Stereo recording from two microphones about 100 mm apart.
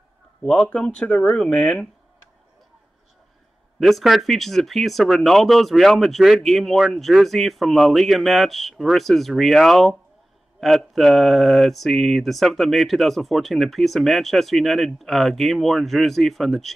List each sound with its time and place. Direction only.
0.5 s speech: 10° left (ahead or behind)
3.8 s mantra: centre (ahead or behind)